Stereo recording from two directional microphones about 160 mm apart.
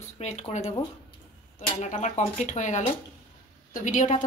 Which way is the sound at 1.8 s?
45° left (ahead or behind).